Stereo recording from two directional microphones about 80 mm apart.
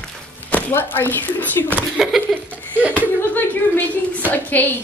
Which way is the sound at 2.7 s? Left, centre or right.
Right.